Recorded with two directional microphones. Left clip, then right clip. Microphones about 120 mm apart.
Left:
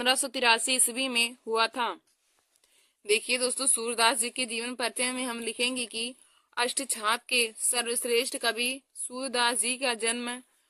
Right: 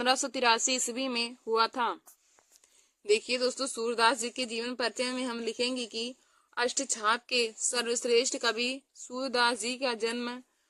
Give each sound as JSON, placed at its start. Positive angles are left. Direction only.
{"t": 0.0, "sound": "speech", "side_deg": 10}
{"t": 3.0, "sound": "speech", "side_deg": 15}